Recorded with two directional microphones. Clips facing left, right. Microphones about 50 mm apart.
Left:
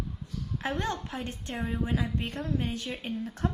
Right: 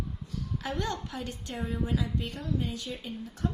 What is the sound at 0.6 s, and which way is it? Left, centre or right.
A woman's voice, left.